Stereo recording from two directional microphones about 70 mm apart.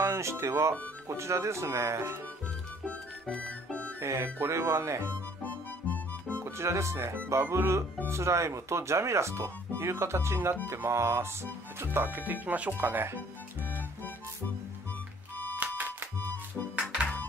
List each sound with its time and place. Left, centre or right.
0.0 s speech: right
3.3 s music: centre
4.0 s speech: right
6.2 s speech: right
13.7 s music: left
15.6 s music: right